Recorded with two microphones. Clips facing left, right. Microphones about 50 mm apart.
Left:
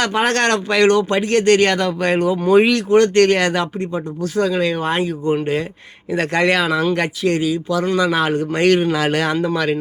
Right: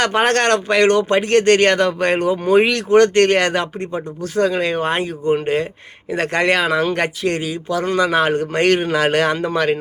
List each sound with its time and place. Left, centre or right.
0.0 s speech: right
2.4 s speech: right
2.9 s speech: right
3.2 s speech: right